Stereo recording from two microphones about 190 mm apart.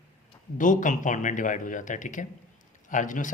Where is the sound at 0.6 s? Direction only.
40° left (ahead or behind).